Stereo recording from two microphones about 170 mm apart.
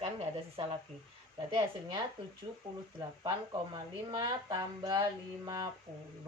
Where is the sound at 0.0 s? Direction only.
35° right (ahead or behind).